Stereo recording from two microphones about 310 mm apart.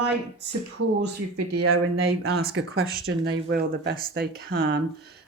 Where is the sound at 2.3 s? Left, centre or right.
Right.